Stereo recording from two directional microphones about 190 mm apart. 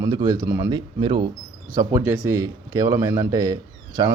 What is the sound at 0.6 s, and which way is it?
Speech, 25° right (ahead or behind).